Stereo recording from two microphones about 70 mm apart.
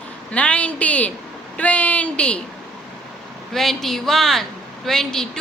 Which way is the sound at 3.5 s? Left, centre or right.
Centre.